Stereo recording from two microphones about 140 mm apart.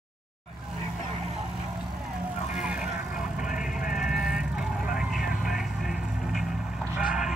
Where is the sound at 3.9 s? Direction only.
5° right (ahead or behind).